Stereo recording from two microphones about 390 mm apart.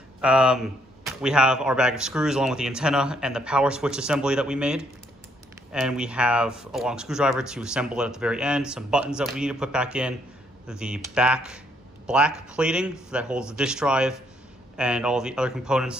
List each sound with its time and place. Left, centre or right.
0.2 s speech: centre